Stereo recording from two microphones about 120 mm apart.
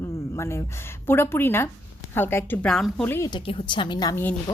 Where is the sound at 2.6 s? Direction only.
5° left (ahead or behind).